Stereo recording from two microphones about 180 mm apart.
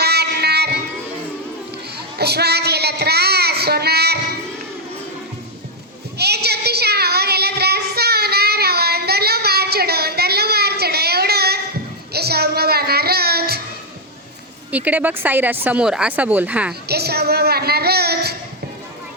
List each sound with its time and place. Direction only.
0.0 s a sound: 65° right (ahead or behind)
2.1 s child singing: 65° right (ahead or behind)
6.1 s child singing: 65° right (ahead or behind)
12.1 s music: 60° right (ahead or behind)
14.7 s speech: 10° right (ahead or behind)
16.9 s a sound: 60° right (ahead or behind)